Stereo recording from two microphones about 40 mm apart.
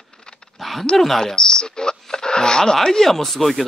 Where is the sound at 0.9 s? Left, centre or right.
Centre.